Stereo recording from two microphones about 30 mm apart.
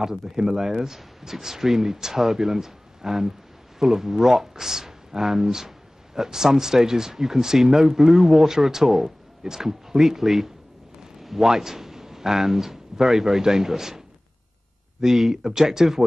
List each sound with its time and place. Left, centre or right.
0.0 s speech: centre